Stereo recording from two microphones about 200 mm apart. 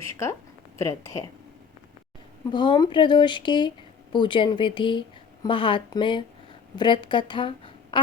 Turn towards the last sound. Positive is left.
turn(degrees=25)  # may be behind; listen again after turning